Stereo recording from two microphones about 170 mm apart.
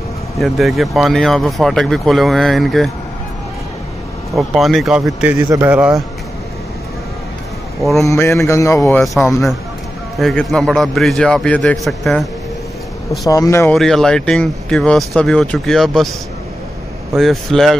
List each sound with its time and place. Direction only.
0.4 s speech: centre (ahead or behind)
4.4 s a man's voice: centre (ahead or behind)
7.8 s speech: centre (ahead or behind)
8.1 s speech: 15° left (ahead or behind)
10.1 s speech: centre (ahead or behind)
13.3 s speech: 20° left (ahead or behind)
13.7 s speech: centre (ahead or behind)
17.1 s speech: centre (ahead or behind)